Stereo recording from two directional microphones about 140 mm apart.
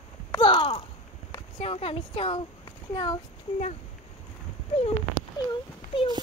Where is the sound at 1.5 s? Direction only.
45° left (ahead or behind).